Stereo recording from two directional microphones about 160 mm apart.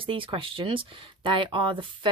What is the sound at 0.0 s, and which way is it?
Speech, 35° right (ahead or behind).